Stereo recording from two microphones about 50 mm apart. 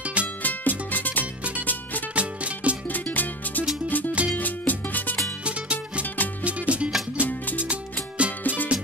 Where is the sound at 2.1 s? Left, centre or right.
Right.